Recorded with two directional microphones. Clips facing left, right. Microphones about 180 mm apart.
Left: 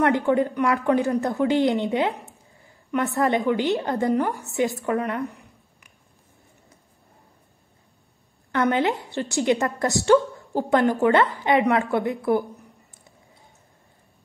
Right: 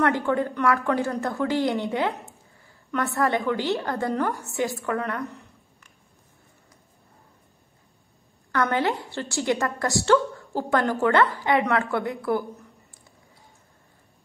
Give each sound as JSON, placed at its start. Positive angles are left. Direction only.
{"t": 0.0, "sound": "a woman's voice", "side_deg": 20}
{"t": 4.8, "sound": "a sound", "side_deg": 20}
{"t": 8.5, "sound": "a woman's voice", "side_deg": 20}